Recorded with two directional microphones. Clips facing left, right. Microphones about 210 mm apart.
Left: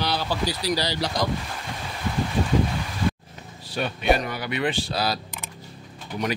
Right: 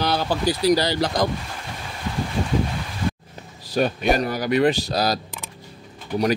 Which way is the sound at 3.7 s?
40° right (ahead or behind).